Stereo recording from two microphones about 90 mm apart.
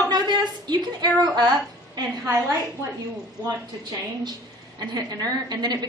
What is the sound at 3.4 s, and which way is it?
A woman's voice, 50° right (ahead or behind).